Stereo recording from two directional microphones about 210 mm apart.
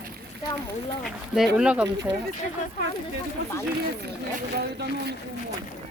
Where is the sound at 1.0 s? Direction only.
Centre (ahead or behind).